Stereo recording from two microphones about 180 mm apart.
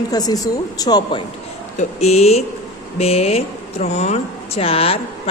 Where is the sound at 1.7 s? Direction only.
35° left (ahead or behind).